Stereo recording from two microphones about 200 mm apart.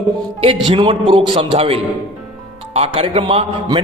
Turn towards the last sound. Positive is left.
turn(degrees=-25)  # may be behind; listen again after turning